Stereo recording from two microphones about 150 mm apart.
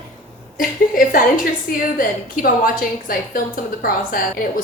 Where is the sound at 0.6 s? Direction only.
70° left (ahead or behind).